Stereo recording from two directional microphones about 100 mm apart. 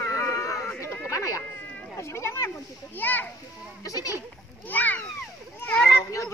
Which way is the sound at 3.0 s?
20° left (ahead or behind).